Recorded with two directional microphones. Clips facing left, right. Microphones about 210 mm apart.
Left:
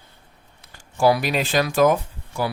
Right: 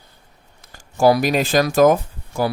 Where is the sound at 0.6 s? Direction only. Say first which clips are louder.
Right 3 dB; 45° right (ahead or behind).